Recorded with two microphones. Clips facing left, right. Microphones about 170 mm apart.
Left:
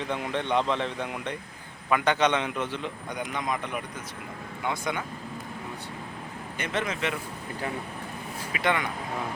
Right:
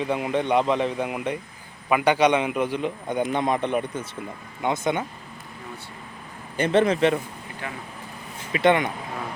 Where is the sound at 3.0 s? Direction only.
30° right (ahead or behind).